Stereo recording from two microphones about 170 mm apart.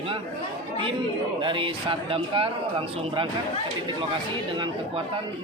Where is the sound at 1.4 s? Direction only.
30° right (ahead or behind).